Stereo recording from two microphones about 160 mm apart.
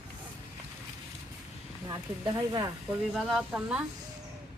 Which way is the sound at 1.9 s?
25° right (ahead or behind).